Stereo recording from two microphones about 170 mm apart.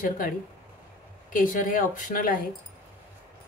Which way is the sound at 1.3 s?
55° left (ahead or behind).